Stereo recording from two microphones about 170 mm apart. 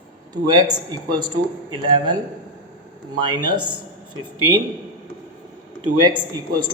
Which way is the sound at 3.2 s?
25° right (ahead or behind).